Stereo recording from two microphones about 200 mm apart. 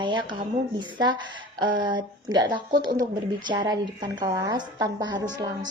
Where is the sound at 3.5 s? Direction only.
20° right (ahead or behind).